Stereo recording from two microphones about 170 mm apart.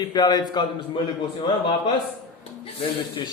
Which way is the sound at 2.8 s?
25° left (ahead or behind).